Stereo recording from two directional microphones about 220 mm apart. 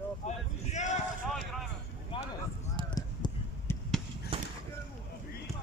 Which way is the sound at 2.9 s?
15° left (ahead or behind).